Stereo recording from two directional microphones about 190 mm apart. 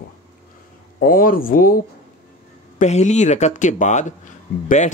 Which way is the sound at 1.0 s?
45° left (ahead or behind).